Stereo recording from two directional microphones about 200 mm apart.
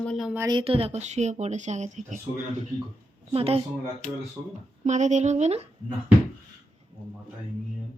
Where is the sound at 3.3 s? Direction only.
30° right (ahead or behind).